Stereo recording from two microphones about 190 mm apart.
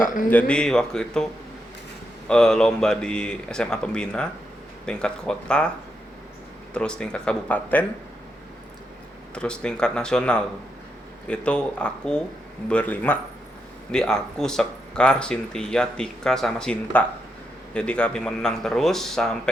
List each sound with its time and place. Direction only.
0.0 s speech: 45° left (ahead or behind)
0.3 s speech: 5° left (ahead or behind)
6.7 s speech: 5° left (ahead or behind)
9.3 s a man's voice: 5° left (ahead or behind)